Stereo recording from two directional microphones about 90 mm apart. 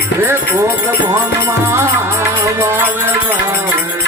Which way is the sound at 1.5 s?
30° right (ahead or behind).